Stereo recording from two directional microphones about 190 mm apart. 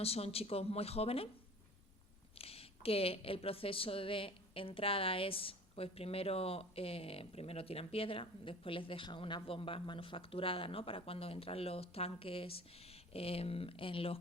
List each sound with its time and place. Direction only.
0.0 s speech: 30° left (ahead or behind)
2.4 s a woman's voice: 30° left (ahead or behind)